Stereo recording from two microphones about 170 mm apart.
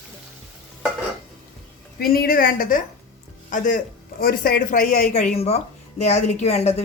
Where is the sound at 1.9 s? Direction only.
65° left (ahead or behind).